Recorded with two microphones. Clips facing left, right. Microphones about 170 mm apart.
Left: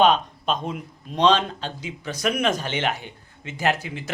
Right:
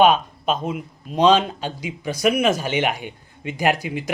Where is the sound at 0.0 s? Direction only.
5° right (ahead or behind).